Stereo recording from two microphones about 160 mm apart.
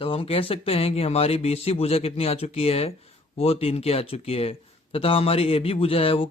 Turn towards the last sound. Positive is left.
turn(degrees=35)  # may be behind; listen again after turning